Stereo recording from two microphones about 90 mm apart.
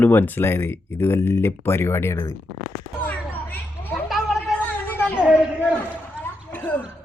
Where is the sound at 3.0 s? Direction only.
20° left (ahead or behind).